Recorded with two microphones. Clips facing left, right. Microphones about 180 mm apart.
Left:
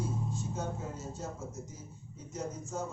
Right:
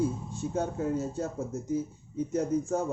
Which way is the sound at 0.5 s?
60° right (ahead or behind).